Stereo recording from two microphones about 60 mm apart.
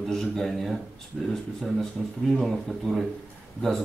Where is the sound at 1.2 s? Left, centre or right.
Centre.